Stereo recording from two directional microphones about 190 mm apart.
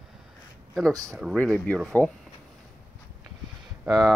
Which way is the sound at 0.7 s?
Centre (ahead or behind).